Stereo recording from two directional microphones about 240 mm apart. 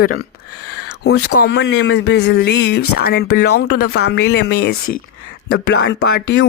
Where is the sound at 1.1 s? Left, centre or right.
Left.